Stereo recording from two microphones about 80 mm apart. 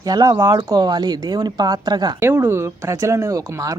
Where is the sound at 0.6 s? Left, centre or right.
Right.